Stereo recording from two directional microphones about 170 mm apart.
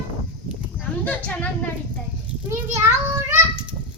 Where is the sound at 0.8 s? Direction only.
10° left (ahead or behind).